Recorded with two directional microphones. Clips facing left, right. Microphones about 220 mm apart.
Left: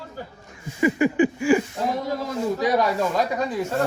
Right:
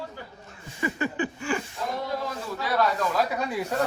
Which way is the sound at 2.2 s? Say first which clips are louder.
Left 8 dB; 15° left (ahead or behind).